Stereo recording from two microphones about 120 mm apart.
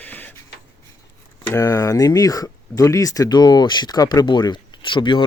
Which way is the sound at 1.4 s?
25° left (ahead or behind).